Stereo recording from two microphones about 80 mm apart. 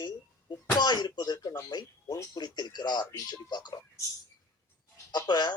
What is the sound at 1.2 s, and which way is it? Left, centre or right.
Speech, left.